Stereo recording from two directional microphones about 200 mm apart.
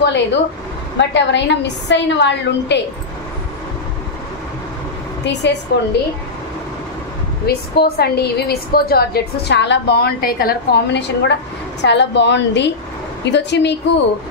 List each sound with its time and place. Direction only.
0.0 s a woman's voice: 60° left (ahead or behind)
5.2 s a woman's voice: 60° left (ahead or behind)
7.4 s a woman's voice: 50° left (ahead or behind)